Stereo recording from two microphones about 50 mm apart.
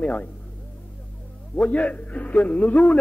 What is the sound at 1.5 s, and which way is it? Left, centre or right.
A man's voice, left.